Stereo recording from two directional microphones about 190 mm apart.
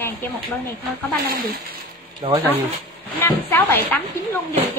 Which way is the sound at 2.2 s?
30° right (ahead or behind).